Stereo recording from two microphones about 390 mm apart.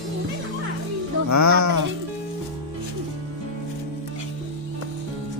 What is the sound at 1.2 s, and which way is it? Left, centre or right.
Speech, right.